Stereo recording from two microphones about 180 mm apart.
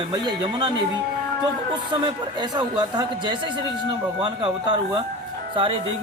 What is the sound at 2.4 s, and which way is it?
Speech, 25° right (ahead or behind).